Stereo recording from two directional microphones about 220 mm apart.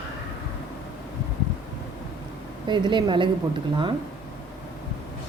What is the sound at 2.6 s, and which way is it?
Speech, 20° right (ahead or behind).